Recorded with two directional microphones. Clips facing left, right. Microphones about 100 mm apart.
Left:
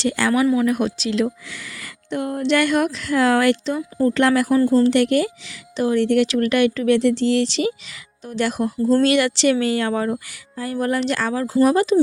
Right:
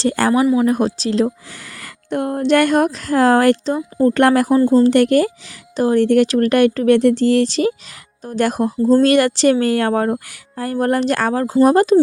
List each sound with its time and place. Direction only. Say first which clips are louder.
0.0 s speech: right 3 dB; 35° right (ahead or behind)
4.4 s speech: right 3 dB; 30° right (ahead or behind); by 11.9 s 45° right (ahead or behind)